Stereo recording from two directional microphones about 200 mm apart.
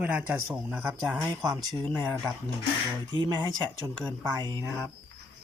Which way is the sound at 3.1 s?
25° right (ahead or behind).